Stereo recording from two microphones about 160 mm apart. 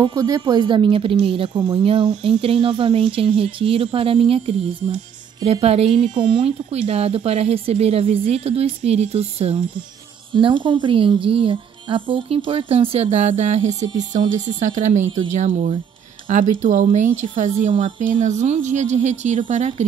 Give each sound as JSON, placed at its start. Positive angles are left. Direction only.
{"t": 0.0, "sound": "a woman's voice", "side_deg": -25}
{"t": 6.1, "sound": "a woman's voice", "side_deg": -30}
{"t": 17.6, "sound": "a woman's voice", "side_deg": -35}
{"t": 18.2, "sound": "speech", "side_deg": -45}